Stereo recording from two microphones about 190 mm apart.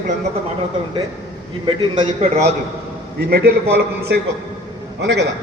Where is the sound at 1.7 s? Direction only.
25° right (ahead or behind).